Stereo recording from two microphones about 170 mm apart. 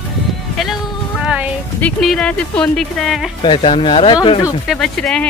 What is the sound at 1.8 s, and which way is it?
Speech, 5° left (ahead or behind).